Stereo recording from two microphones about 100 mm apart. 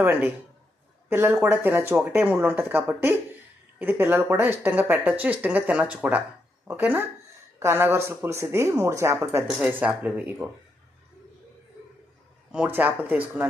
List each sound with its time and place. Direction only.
0.0 s speech: 20° right (ahead or behind)
9.6 s speech: 15° right (ahead or behind)
12.5 s speech: 15° right (ahead or behind)